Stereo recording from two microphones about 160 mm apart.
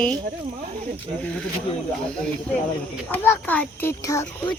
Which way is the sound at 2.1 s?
5° left (ahead or behind).